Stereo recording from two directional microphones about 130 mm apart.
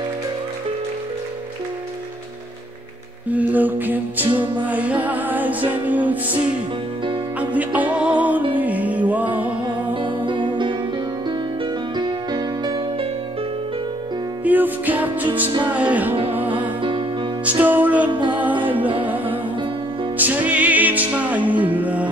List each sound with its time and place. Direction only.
3.3 s music: 10° right (ahead or behind)
4.3 s music: 35° right (ahead or behind)
4.6 s music: 10° right (ahead or behind)
7.3 s music: 10° right (ahead or behind)
10.0 s music: 40° right (ahead or behind)
12.0 s music: 35° right (ahead or behind)
14.4 s music: 15° right (ahead or behind)
17.5 s music: 15° right (ahead or behind)
18.1 s music: 35° right (ahead or behind)
18.6 s music: 15° right (ahead or behind)
20.2 s music: 15° right (ahead or behind)